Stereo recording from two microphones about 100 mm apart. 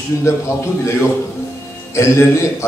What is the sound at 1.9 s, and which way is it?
Speech, 30° left (ahead or behind).